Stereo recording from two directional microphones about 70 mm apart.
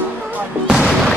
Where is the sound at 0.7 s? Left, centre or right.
Centre.